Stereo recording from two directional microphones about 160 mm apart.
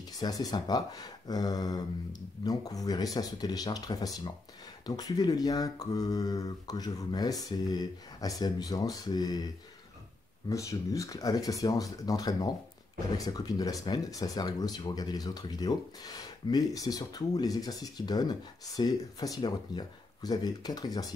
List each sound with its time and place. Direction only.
0.2 s speech: 25° left (ahead or behind)
10.5 s speech: 20° left (ahead or behind)